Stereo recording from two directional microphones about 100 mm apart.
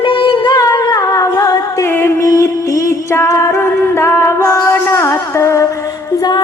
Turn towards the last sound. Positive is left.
turn(degrees=30)  # may be behind; listen again after turning